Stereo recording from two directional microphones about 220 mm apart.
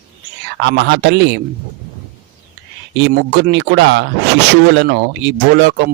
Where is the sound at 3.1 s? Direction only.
45° right (ahead or behind).